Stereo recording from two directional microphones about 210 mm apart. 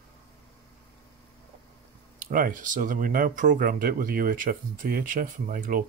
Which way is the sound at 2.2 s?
40° right (ahead or behind).